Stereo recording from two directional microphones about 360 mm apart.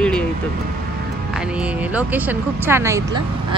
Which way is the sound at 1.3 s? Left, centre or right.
Centre.